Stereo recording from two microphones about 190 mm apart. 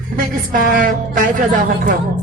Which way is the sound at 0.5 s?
45° right (ahead or behind).